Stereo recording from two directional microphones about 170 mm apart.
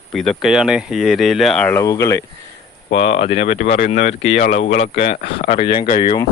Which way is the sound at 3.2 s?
40° left (ahead or behind).